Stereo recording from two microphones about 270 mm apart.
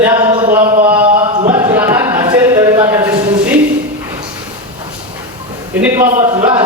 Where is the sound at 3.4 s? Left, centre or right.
Centre.